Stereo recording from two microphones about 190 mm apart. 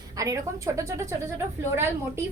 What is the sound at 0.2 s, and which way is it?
A woman's voice, 15° right (ahead or behind).